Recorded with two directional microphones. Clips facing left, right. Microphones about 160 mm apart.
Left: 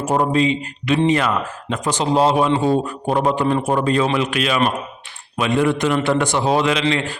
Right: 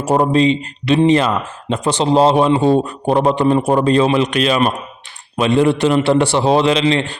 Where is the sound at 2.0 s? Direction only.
25° right (ahead or behind).